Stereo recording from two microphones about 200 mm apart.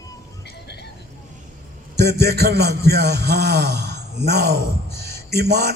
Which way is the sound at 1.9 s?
55° right (ahead or behind).